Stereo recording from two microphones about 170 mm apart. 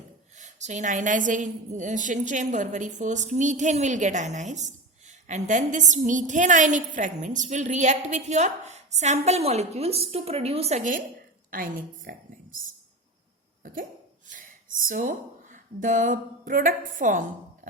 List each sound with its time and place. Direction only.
0.3 s a woman's voice: 45° right (ahead or behind)
14.8 s speech: 50° right (ahead or behind)